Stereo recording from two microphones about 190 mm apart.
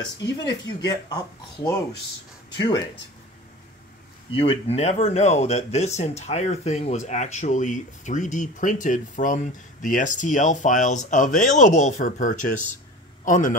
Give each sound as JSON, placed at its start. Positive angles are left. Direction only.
{"t": 0.4, "sound": "speech", "side_deg": 20}
{"t": 4.3, "sound": "a man's voice", "side_deg": 30}